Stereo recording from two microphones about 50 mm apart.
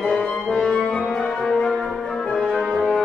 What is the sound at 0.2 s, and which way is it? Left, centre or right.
Music, centre.